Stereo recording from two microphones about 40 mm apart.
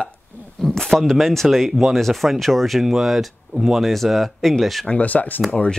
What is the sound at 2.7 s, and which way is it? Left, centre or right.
Speech, centre.